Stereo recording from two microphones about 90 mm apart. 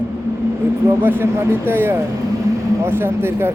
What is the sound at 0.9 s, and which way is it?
Speech, 25° right (ahead or behind).